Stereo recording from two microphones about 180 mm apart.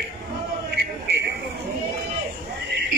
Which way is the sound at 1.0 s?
70° right (ahead or behind).